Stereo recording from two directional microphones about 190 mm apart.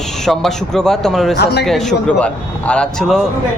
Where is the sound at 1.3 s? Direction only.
60° left (ahead or behind).